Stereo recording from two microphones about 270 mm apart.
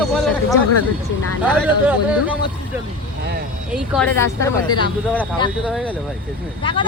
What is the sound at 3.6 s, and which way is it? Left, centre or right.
Speech, centre.